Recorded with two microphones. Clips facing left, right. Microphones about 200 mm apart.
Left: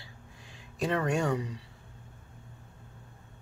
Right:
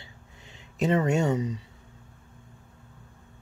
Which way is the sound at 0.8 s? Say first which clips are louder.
Right 5 dB; 20° right (ahead or behind).